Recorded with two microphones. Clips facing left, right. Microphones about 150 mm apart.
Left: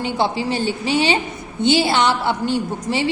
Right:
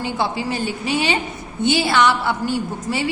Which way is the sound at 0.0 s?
25° left (ahead or behind).